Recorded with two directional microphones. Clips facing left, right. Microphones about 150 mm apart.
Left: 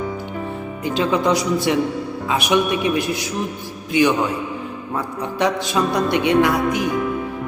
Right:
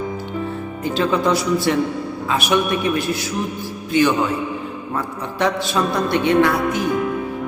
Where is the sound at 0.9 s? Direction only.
15° left (ahead or behind).